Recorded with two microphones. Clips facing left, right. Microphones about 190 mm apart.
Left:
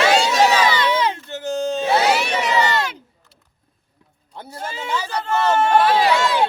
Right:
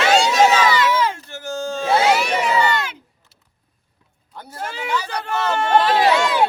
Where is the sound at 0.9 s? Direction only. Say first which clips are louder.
Even; 20° left (ahead or behind).